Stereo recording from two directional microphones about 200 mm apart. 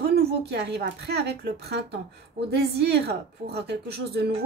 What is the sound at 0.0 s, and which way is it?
A woman's voice, 55° right (ahead or behind).